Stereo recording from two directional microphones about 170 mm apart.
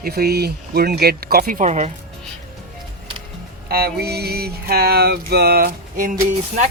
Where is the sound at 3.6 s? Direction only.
65° right (ahead or behind).